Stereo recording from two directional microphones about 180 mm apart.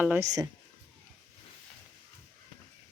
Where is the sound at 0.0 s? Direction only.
10° right (ahead or behind).